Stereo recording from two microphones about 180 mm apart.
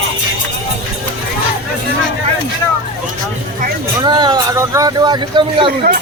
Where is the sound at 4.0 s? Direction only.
25° right (ahead or behind).